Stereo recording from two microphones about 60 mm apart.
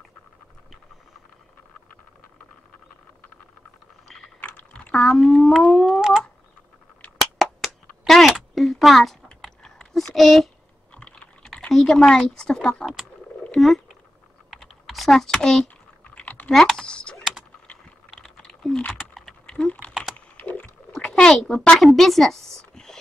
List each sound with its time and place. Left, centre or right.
4.4 s ratchet: left
4.9 s speech: centre
5.9 s a sound: centre
8.3 s a sound: centre
11.7 s speech: centre
13.6 s speech: centre
14.5 s typing: centre
16.2 s typing: left
16.5 s typing: centre
18.1 s typing: centre
19.9 s typing: centre
20.2 s typing: left
21.2 s speech: centre
21.7 s a woman's voice: centre